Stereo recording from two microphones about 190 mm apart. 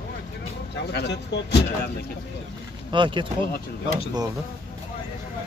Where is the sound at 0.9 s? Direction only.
60° left (ahead or behind).